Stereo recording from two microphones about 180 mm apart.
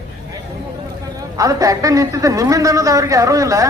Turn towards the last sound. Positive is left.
turn(degrees=-20)  # may be behind; listen again after turning